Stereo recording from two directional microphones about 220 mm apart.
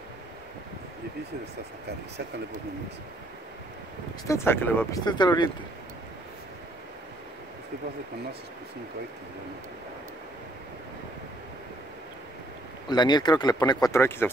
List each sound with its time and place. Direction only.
4.3 s speech: 10° left (ahead or behind)
12.9 s speech: 20° left (ahead or behind)